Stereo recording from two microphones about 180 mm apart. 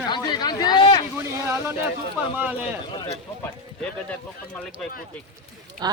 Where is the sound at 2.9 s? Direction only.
25° left (ahead or behind).